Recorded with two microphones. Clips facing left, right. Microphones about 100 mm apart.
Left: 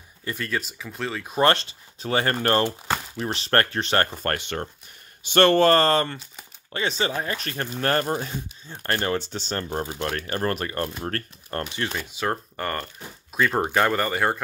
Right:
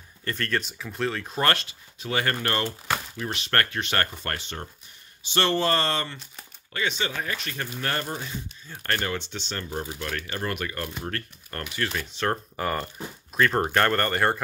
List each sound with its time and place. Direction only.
0.2 s speech: 10° left (ahead or behind)
1.3 s speech: 25° left (ahead or behind)
4.2 s speech: 55° left (ahead or behind)
6.7 s speech: 35° left (ahead or behind)
7.8 s speech: 45° left (ahead or behind)
9.7 s speech: 50° left (ahead or behind)
10.0 s speech: 40° left (ahead or behind)
11.8 s speech: 20° left (ahead or behind)
12.1 s speech: 5° left (ahead or behind)